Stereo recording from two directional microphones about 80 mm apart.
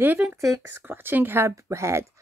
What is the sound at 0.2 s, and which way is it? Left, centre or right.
Speech, centre.